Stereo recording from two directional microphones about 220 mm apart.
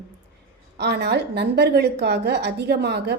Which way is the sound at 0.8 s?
50° right (ahead or behind).